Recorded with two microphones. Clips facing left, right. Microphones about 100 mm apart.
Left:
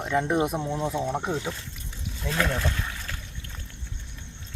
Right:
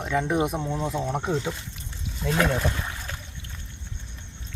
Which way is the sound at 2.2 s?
10° right (ahead or behind).